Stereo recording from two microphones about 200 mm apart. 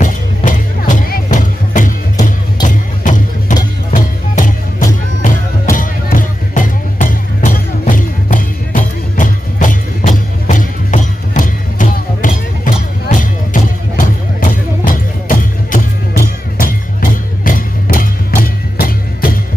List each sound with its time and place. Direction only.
0.0 s music: 40° left (ahead or behind)